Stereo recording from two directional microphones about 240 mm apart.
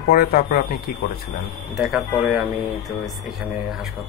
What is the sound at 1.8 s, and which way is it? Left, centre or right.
Speech, centre.